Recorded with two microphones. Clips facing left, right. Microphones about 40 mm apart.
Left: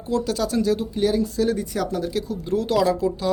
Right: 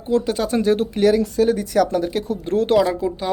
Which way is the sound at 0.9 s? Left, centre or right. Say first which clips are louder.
Right 6 dB; right.